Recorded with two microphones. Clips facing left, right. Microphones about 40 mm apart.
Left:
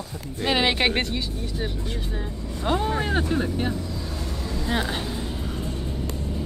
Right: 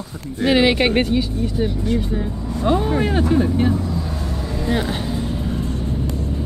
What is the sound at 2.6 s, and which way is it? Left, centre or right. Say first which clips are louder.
Speech: right 6 dB; centre.